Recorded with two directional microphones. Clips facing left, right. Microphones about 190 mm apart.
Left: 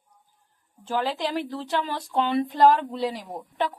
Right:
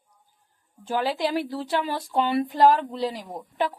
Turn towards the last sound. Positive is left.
turn(degrees=0)  # may be behind; listen again after turning